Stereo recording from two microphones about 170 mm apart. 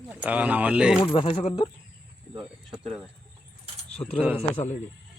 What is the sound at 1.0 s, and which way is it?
Speech, 30° left (ahead or behind).